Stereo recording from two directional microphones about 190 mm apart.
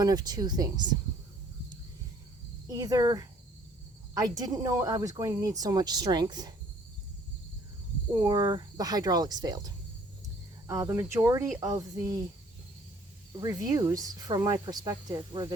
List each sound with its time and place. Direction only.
0.0 s speech: 20° right (ahead or behind)
2.6 s speech: 20° right (ahead or behind)
8.1 s speech: 20° right (ahead or behind)
13.4 s speech: 20° right (ahead or behind)